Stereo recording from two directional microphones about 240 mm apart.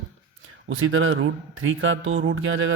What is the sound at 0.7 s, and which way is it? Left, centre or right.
Speech, right.